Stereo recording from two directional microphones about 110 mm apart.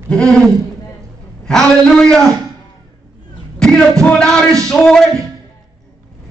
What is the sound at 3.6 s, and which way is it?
Speech, 10° left (ahead or behind).